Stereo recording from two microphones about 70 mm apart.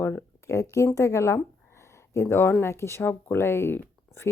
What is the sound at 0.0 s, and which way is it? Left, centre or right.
Speech, left.